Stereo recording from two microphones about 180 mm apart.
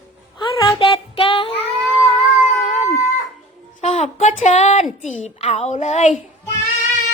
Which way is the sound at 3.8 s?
40° left (ahead or behind).